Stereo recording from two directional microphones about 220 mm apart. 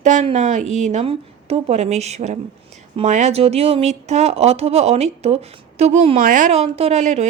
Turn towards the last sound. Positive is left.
turn(degrees=-30)  # may be behind; listen again after turning